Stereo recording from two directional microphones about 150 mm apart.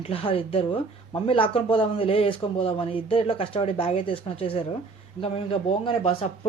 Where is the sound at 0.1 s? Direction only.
40° left (ahead or behind).